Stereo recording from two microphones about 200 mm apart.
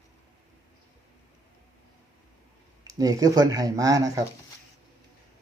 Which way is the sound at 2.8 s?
15° right (ahead or behind).